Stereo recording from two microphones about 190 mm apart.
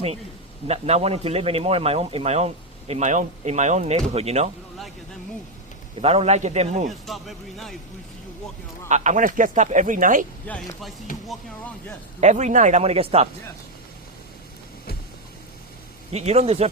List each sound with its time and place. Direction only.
0.7 s speech: 35° right (ahead or behind)
6.0 s speech: 30° right (ahead or behind)
6.9 s speech: centre (ahead or behind)
8.9 s speech: 40° right (ahead or behind)
10.5 s speech: 10° left (ahead or behind)
12.2 s speech: 40° right (ahead or behind)
16.1 s speech: 35° right (ahead or behind)